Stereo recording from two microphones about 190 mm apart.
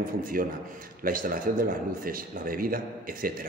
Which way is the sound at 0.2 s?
50° right (ahead or behind).